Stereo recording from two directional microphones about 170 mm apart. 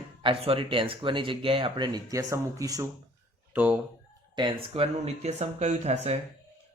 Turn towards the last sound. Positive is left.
turn(degrees=-45)  # may be behind; listen again after turning